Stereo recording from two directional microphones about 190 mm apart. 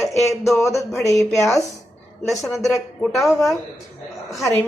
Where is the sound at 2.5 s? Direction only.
Centre (ahead or behind).